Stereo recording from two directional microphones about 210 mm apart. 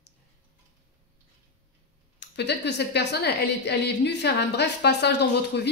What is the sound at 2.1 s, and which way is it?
A woman's voice, 55° left (ahead or behind).